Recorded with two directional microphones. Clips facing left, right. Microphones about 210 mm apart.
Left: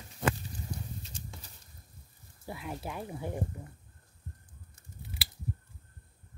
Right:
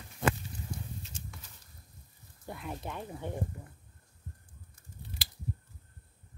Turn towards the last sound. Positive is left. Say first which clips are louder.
# left 1 dB
turn(degrees=5)  # may be behind; listen again after turning